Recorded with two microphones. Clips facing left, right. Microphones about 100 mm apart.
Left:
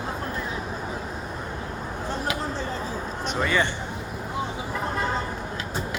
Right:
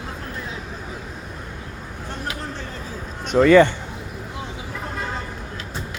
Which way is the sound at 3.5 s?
50° right (ahead or behind).